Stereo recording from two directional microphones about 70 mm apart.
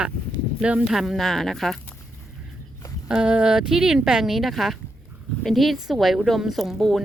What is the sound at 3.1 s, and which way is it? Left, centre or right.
A woman's voice, centre.